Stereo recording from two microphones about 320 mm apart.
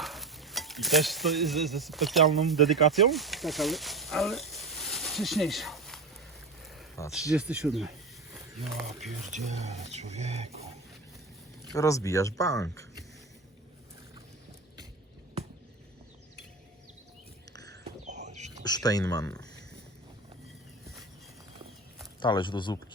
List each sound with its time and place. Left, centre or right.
0.0 s stir: centre
6.7 s a sound: centre
7.3 s speech: centre
9.0 s speech: centre
9.3 s speech: right
11.7 s speech: centre
17.7 s whispering: right
18.6 s speech: centre
22.2 s speech: centre